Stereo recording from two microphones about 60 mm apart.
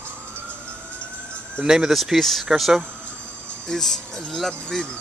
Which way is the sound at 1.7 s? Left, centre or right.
Centre.